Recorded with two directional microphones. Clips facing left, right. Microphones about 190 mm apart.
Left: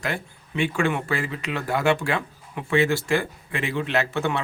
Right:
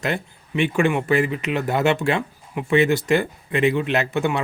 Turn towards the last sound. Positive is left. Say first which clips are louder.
# right 3 dB
turn(degrees=-15)  # may be behind; listen again after turning